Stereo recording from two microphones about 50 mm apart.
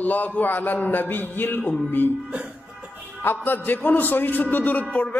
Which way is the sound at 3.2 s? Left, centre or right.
Left.